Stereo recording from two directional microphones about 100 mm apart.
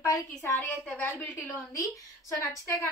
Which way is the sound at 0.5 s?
10° left (ahead or behind).